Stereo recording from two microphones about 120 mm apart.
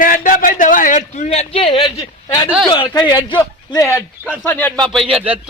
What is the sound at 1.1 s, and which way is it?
Speech, 70° left (ahead or behind).